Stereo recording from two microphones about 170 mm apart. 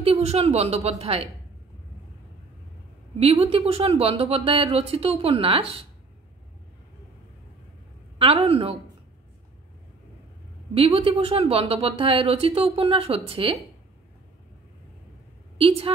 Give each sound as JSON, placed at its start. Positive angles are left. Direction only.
{"t": 0.0, "sound": "speech", "side_deg": -40}
{"t": 3.2, "sound": "speech", "side_deg": -35}
{"t": 8.2, "sound": "speech", "side_deg": -35}
{"t": 10.7, "sound": "speech", "side_deg": -35}
{"t": 15.5, "sound": "a woman's voice", "side_deg": -35}